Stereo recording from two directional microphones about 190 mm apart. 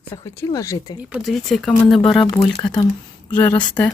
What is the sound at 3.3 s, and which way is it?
Speech, 10° left (ahead or behind).